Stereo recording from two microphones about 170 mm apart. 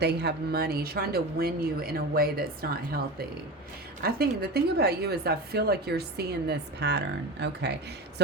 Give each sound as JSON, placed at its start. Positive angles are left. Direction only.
{"t": 0.0, "sound": "a woman's voice", "side_deg": -75}